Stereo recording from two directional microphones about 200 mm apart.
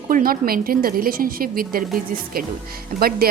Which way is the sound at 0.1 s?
45° right (ahead or behind).